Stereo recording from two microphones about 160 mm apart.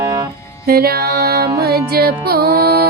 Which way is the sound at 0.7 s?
75° right (ahead or behind).